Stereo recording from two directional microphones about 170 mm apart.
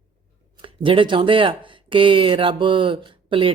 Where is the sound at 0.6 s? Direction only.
30° right (ahead or behind).